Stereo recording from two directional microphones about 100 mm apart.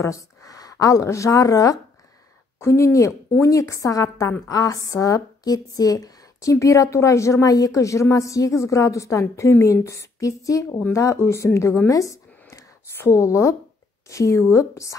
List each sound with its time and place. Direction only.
0.0 s speech: 35° left (ahead or behind)